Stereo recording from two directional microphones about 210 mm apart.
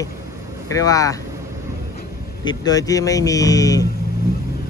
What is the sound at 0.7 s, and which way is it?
Speech, 15° left (ahead or behind).